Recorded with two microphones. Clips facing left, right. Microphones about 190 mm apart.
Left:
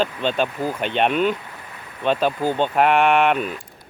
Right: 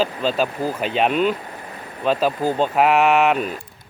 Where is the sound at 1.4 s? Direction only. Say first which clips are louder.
Right 5 dB; 40° right (ahead or behind).